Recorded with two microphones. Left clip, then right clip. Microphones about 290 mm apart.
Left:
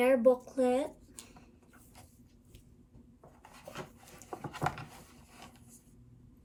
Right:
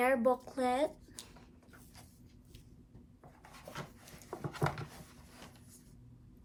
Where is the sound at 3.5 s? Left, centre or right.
Centre.